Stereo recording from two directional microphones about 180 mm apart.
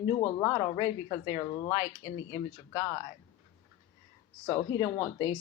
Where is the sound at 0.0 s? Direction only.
25° left (ahead or behind).